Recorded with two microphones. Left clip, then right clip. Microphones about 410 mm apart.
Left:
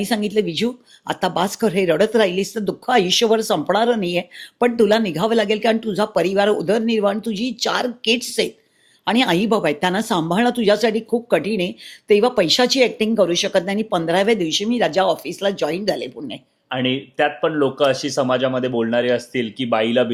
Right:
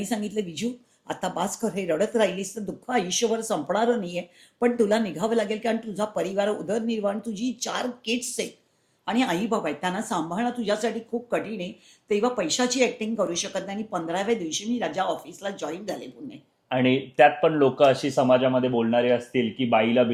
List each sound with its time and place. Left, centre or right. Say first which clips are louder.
0.0 s a woman's voice: left 9 dB; left
9.0 s speech: left 8 dB; left
16.6 s speech: left 1 dB; centre